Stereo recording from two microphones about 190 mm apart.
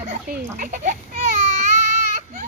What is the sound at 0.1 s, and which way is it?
A child's voice, 50° right (ahead or behind).